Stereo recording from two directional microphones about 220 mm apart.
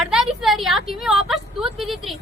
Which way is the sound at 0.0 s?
Centre (ahead or behind).